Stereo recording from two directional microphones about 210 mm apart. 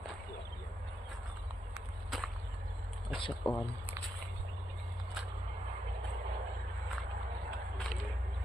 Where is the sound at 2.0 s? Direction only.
Centre (ahead or behind).